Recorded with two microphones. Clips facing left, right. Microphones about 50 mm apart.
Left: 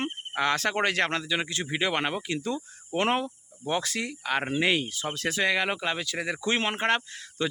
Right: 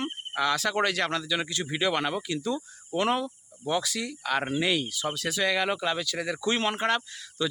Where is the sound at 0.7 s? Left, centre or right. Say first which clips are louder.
Left 1 dB; left.